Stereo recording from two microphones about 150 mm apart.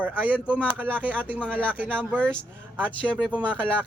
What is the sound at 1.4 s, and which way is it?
Speech, 10° left (ahead or behind).